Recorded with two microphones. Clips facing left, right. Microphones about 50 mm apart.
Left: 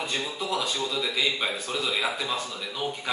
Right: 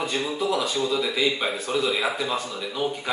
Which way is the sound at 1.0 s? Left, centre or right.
Centre.